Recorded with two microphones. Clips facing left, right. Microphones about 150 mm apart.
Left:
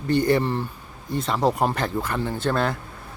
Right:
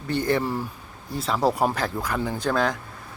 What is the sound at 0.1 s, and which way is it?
Speech, centre (ahead or behind).